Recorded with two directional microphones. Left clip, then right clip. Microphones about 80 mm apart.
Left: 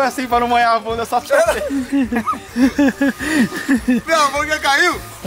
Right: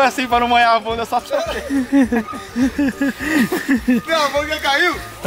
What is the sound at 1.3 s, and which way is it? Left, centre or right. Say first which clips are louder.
Speech: left 7 dB; left.